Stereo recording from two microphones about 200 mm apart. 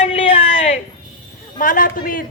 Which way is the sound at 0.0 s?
30° left (ahead or behind).